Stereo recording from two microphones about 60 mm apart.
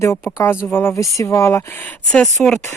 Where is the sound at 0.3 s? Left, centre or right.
Left.